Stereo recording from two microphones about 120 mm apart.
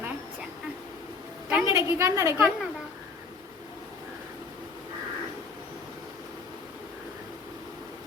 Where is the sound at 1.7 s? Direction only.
25° right (ahead or behind).